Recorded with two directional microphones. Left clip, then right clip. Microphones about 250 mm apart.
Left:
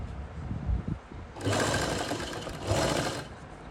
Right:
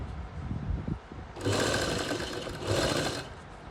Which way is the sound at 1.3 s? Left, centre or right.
Centre.